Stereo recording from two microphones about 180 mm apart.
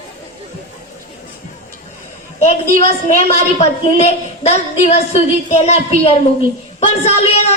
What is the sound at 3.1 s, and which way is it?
A woman's voice, 40° left (ahead or behind).